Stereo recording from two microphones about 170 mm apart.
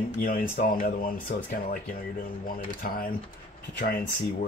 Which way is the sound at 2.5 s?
55° left (ahead or behind).